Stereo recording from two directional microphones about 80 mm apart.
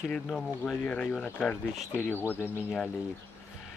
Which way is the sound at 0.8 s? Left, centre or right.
Centre.